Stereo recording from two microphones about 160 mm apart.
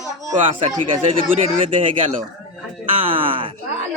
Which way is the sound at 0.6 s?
45° right (ahead or behind).